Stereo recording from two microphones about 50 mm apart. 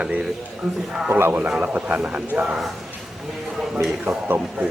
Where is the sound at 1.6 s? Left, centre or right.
Right.